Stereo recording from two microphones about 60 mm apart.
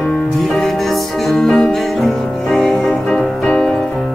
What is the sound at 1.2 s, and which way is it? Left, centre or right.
Music, centre.